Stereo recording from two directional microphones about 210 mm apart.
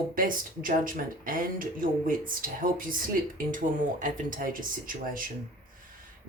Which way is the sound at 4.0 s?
40° right (ahead or behind).